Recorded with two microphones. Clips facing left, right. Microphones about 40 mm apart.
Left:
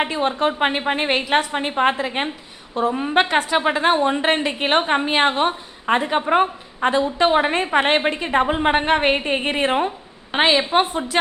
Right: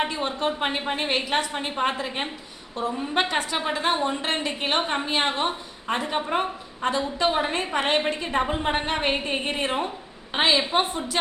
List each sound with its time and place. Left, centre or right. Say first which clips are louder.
0.0 s a woman's voice: left 6 dB; left